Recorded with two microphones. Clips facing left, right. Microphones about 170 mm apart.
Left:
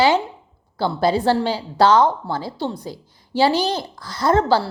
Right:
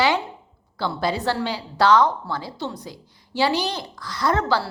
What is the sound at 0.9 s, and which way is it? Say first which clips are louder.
A woman's voice: left 6 dB; 30° left (ahead or behind).